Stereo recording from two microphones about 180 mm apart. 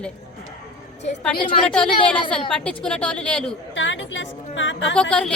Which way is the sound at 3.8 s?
90° left.